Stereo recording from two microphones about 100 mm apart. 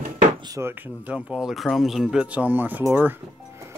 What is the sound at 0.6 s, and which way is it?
Speech, 20° right (ahead or behind).